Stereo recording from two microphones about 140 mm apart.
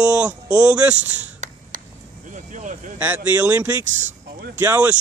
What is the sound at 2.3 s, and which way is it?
Vehicle, 65° right (ahead or behind).